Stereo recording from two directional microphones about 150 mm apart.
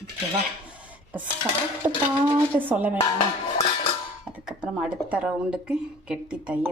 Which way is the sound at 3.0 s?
35° left (ahead or behind).